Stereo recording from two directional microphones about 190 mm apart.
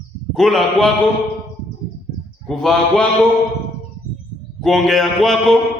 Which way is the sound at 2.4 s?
5° left (ahead or behind).